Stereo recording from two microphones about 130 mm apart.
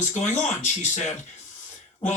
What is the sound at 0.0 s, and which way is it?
Speech, 65° left (ahead or behind).